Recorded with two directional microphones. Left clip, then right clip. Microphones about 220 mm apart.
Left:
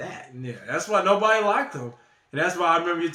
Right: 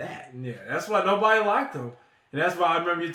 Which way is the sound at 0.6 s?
25° left (ahead or behind).